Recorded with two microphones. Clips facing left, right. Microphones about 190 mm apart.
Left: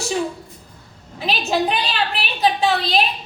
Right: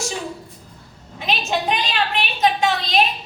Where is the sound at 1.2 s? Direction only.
35° left (ahead or behind).